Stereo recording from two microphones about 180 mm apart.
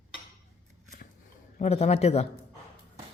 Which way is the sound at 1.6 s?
35° left (ahead or behind).